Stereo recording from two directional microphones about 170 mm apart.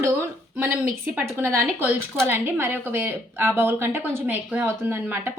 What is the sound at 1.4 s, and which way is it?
Speech, 10° right (ahead or behind).